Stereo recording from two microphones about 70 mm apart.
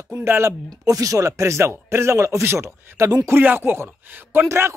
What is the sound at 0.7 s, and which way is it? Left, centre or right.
Speech, right.